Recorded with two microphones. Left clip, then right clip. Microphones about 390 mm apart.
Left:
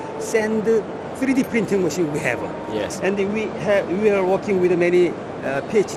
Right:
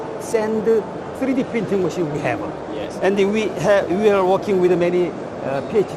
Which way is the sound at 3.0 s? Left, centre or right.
Right.